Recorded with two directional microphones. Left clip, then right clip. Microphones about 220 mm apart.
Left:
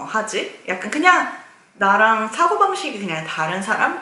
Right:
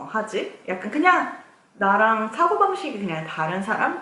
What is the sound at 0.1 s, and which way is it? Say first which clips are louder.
A woman's voice: left 3 dB; 10° right (ahead or behind).